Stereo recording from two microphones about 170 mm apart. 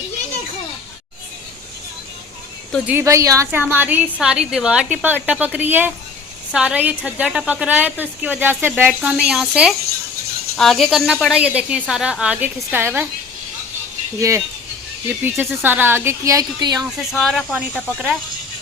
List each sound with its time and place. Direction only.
2.8 s a woman's voice: 15° right (ahead or behind)
14.2 s a woman's voice: 15° right (ahead or behind)
17.0 s speech: centre (ahead or behind)